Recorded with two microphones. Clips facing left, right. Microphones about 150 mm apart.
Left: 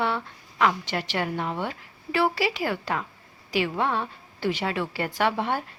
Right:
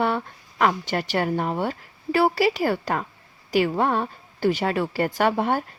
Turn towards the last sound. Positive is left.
turn(degrees=-45)  # may be behind; listen again after turning